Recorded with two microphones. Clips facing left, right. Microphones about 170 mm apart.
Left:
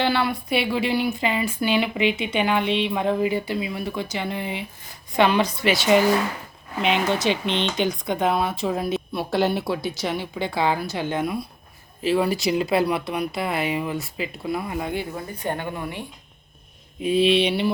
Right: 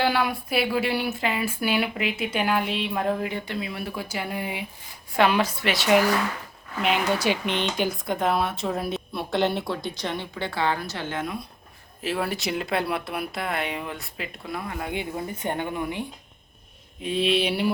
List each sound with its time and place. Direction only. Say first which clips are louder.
0.0 s speech: left 1 dB; 10° right (ahead or behind)
7.2 s speech: left 2 dB; 10° right (ahead or behind); by 11.4 s 10° left (ahead or behind)
12.0 s speech: left 6 dB; centre (ahead or behind)
14.9 s a woman's voice: left 1 dB; 20° right (ahead or behind)
17.0 s speech: left 5 dB; 5° left (ahead or behind)